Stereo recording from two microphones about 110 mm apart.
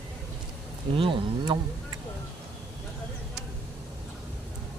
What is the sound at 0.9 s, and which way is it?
Speech, 50° right (ahead or behind).